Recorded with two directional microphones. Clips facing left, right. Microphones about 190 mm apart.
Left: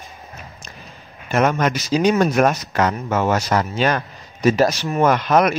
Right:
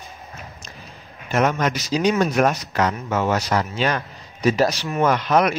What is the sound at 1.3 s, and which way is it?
Speech, 55° left (ahead or behind).